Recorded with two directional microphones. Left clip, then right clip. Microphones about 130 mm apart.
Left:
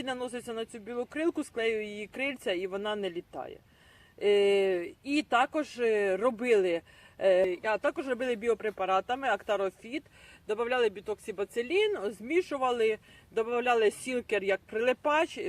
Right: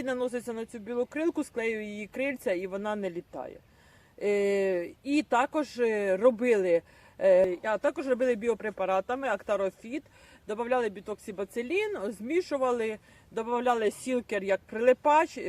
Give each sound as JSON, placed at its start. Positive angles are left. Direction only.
{"t": 0.0, "sound": "speech", "side_deg": -25}